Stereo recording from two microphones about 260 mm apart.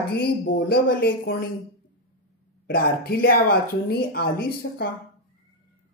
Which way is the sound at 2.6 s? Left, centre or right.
Left.